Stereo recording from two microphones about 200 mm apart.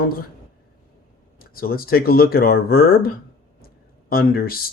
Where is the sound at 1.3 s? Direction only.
45° left (ahead or behind).